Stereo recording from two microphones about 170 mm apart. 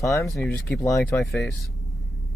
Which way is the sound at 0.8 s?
20° left (ahead or behind).